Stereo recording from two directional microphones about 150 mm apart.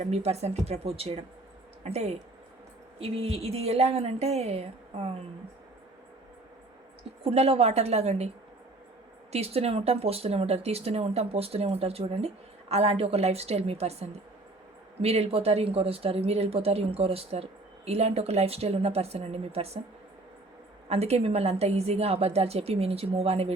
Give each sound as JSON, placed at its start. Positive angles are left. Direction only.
{"t": 0.0, "sound": "a woman's voice", "side_deg": -45}
{"t": 7.3, "sound": "a woman's voice", "side_deg": -40}
{"t": 9.3, "sound": "a woman's voice", "side_deg": -45}
{"t": 20.9, "sound": "a woman's voice", "side_deg": -45}